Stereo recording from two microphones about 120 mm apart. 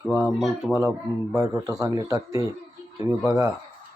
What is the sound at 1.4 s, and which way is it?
A man's voice, 30° right (ahead or behind).